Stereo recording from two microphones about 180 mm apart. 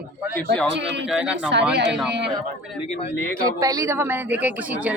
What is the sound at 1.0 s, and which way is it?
Speech, 5° right (ahead or behind).